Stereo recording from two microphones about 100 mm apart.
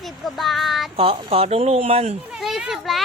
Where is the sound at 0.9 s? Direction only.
70° right (ahead or behind); by 2.1 s 90° right.